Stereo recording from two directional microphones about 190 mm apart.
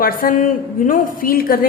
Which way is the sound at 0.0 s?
45° left (ahead or behind).